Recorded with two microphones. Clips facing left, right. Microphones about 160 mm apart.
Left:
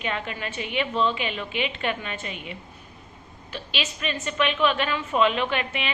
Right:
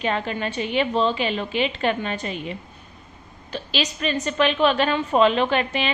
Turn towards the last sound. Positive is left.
turn(degrees=-35)  # may be behind; listen again after turning